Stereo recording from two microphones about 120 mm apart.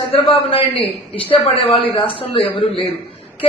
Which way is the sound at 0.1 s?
50° left (ahead or behind).